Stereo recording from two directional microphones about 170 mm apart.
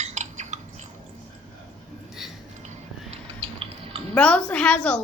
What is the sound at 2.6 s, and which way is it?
Chewing, 40° right (ahead or behind).